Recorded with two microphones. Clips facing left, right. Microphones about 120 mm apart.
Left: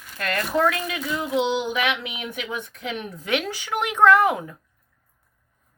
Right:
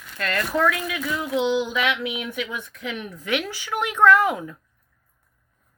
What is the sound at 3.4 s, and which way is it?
Speech, 20° left (ahead or behind).